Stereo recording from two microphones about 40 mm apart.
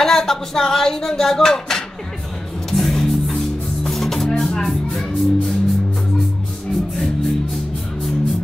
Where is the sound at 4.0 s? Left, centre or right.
Centre.